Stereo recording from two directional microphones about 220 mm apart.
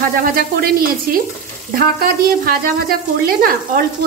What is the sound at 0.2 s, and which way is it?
A woman's voice, 40° right (ahead or behind).